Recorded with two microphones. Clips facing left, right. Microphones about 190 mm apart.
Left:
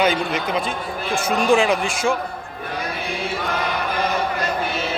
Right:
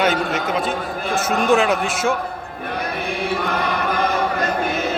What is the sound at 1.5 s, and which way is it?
Speech, centre (ahead or behind).